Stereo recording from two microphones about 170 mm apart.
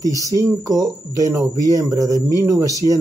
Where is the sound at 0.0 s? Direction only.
20° right (ahead or behind).